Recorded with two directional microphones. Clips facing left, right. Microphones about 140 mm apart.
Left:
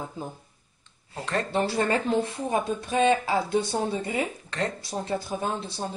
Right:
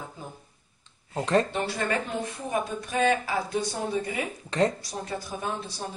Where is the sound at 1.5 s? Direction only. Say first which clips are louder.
Left 4 dB; 30° left (ahead or behind).